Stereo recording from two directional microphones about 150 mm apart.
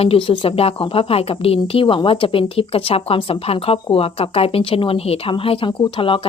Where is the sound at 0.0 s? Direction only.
40° left (ahead or behind).